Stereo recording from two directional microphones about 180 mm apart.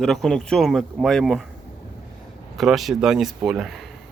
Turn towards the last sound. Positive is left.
turn(degrees=0)  # may be behind; listen again after turning